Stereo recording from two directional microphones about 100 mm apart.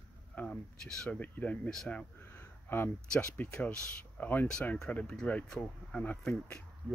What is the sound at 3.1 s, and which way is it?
Speech, 15° left (ahead or behind).